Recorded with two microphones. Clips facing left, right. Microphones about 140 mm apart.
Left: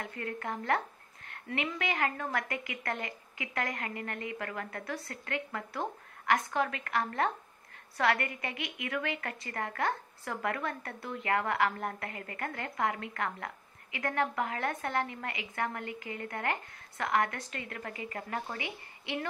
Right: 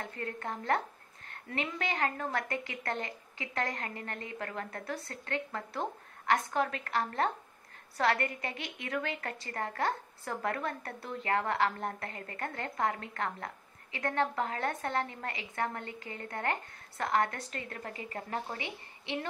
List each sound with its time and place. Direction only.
0.0 s a woman's voice: 30° right (ahead or behind)